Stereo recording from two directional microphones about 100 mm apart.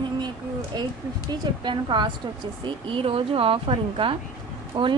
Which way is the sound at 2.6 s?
65° right (ahead or behind).